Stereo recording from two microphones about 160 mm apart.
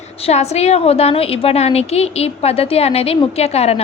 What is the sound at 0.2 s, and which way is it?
A woman's voice, 40° left (ahead or behind).